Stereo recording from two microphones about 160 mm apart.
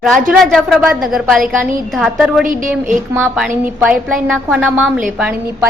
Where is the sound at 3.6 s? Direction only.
10° right (ahead or behind).